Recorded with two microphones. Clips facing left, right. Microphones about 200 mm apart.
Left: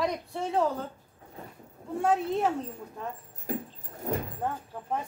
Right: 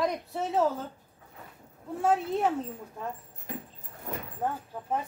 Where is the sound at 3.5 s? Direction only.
40° left (ahead or behind).